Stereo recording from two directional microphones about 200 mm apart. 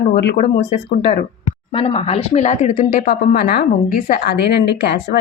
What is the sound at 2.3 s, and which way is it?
Speech, 35° left (ahead or behind).